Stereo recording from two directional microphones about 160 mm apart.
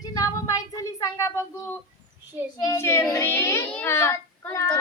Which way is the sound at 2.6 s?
15° left (ahead or behind).